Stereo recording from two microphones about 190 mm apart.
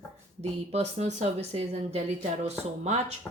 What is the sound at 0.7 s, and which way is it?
Speech, 35° right (ahead or behind).